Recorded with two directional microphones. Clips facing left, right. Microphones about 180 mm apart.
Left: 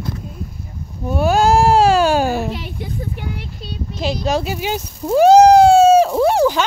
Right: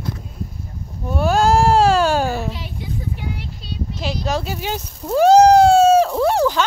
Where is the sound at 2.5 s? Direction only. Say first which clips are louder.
Left 2 dB; 60° left (ahead or behind).